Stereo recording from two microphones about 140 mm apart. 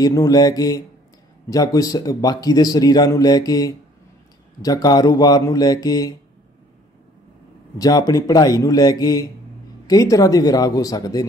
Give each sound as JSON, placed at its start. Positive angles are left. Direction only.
{"t": 0.0, "sound": "speech", "side_deg": 25}
{"t": 7.8, "sound": "speech", "side_deg": 25}